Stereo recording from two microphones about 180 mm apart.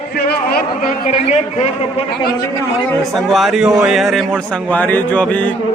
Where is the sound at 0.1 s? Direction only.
60° left (ahead or behind); by 2.0 s 40° left (ahead or behind).